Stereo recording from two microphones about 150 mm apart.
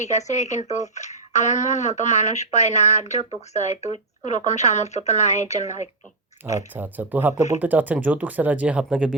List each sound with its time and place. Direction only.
0.0 s speech: 50° left (ahead or behind)
6.4 s speech: 10° right (ahead or behind)